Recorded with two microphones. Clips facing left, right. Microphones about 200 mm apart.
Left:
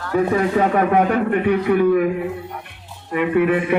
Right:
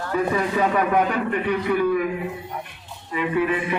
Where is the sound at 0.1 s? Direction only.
65° left (ahead or behind).